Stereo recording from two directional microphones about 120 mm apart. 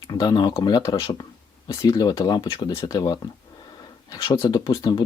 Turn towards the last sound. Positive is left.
turn(degrees=35)  # may be behind; listen again after turning